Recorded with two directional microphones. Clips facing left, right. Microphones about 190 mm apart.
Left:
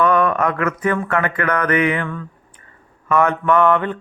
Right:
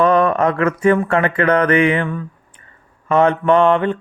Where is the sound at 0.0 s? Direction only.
30° right (ahead or behind).